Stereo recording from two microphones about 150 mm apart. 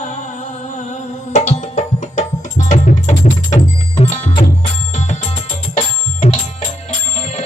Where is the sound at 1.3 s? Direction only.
50° left (ahead or behind).